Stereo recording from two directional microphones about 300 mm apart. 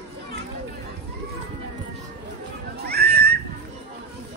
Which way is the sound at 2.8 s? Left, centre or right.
Right.